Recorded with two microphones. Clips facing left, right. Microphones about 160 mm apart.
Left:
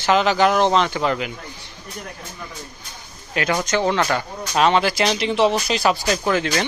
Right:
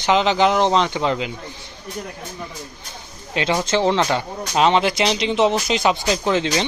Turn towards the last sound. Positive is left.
turn(degrees=-20)  # may be behind; listen again after turning